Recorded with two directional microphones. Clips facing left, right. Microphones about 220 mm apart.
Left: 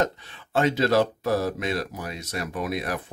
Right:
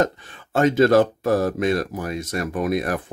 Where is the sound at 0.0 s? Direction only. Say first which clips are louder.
Right 4 dB; 45° right (ahead or behind).